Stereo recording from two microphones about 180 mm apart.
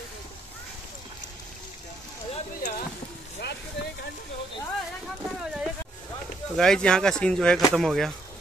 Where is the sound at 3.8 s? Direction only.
75° left (ahead or behind).